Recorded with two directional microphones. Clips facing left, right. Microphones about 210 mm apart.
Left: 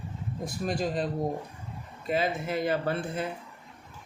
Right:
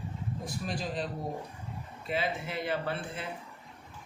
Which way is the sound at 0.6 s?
45° left (ahead or behind).